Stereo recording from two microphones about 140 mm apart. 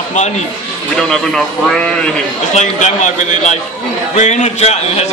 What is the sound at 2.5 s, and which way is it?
A man's voice, 60° left (ahead or behind).